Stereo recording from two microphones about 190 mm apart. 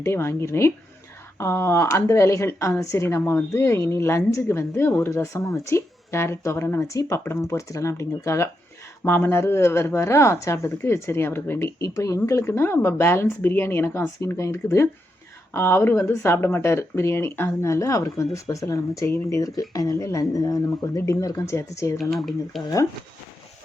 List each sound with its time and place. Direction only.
0.0 s speech: 15° left (ahead or behind)
21.9 s speech: centre (ahead or behind)